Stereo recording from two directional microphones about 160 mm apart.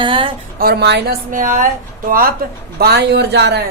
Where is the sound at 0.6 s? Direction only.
80° right.